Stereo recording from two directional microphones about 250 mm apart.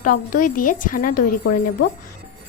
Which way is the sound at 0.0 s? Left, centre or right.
Left.